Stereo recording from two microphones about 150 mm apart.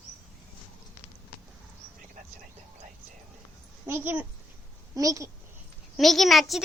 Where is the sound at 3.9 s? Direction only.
10° right (ahead or behind).